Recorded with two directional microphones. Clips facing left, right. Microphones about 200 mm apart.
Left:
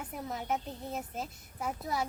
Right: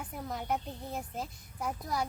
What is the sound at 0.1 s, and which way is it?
A woman's voice, 5° left (ahead or behind).